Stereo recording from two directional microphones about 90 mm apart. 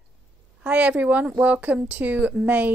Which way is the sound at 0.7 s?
15° right (ahead or behind).